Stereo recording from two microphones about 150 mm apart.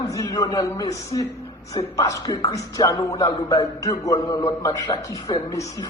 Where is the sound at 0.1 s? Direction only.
25° left (ahead or behind).